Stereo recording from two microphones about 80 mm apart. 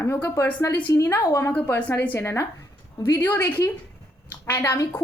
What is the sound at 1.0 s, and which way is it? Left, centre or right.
Speech, left.